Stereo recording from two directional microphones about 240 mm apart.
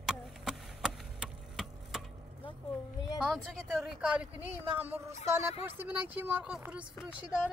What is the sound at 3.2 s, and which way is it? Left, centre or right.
Speech, centre.